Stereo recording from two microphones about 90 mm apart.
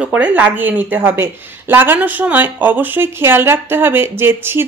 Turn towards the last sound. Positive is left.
turn(degrees=-25)  # may be behind; listen again after turning